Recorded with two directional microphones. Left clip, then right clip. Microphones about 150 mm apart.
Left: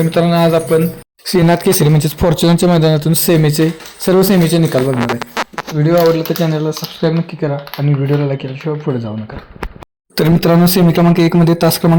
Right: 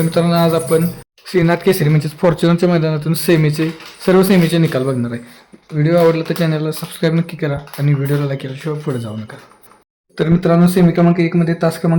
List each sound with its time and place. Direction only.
0.0 s speech: 5° left (ahead or behind)
1.3 s speech: 35° left (ahead or behind); by 7.2 s 10° right (ahead or behind)
7.4 s speech: 10° left (ahead or behind)
10.2 s speech: 55° left (ahead or behind); by 11.9 s 35° left (ahead or behind)